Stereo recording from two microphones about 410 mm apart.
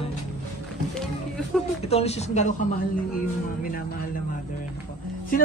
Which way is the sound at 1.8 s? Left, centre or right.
Centre.